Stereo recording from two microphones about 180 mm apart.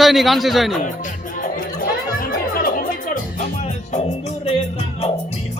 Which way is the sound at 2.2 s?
50° left (ahead or behind).